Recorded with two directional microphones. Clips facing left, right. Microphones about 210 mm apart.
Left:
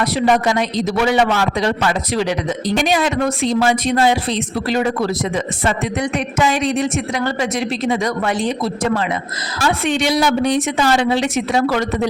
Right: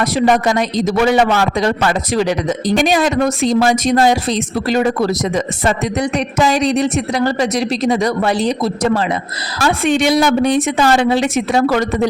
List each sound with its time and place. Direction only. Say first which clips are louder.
0.0 s a man's voice: right 2 dB; 45° right (ahead or behind)
9.8 s a woman's voice: right 5 dB; 50° right (ahead or behind)